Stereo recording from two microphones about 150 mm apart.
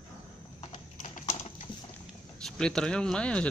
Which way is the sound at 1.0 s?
55° left (ahead or behind).